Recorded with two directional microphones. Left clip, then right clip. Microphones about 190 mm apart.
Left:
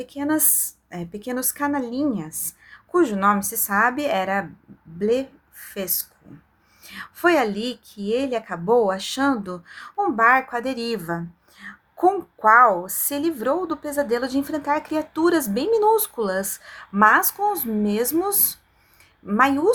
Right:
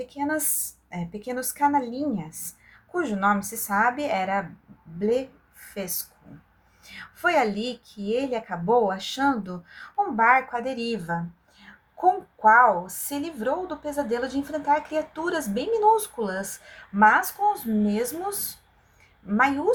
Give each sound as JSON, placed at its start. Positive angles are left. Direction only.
{"t": 0.0, "sound": "a woman's voice", "side_deg": 35}